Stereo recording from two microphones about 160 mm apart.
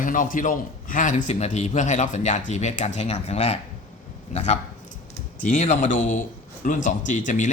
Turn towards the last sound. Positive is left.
turn(degrees=50)  # may be behind; listen again after turning